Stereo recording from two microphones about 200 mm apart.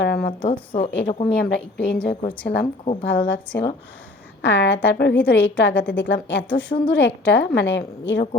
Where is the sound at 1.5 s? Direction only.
60° left (ahead or behind).